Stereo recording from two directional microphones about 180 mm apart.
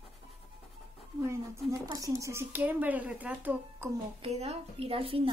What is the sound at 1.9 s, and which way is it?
Speech, 20° right (ahead or behind).